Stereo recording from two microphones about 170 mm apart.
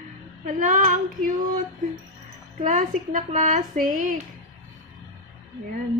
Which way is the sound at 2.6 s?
50° right (ahead or behind).